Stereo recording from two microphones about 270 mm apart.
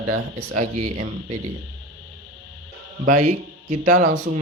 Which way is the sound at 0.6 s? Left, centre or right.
Right.